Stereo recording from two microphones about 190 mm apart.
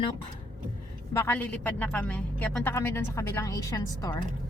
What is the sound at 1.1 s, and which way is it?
Speech, 10° left (ahead or behind).